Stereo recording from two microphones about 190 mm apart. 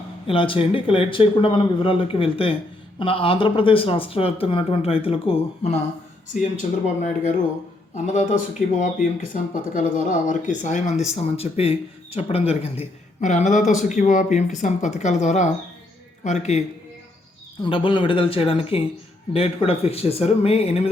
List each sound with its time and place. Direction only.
0.3 s speech: 25° left (ahead or behind)
6.4 s speech: 40° left (ahead or behind)
17.6 s speech: 25° left (ahead or behind)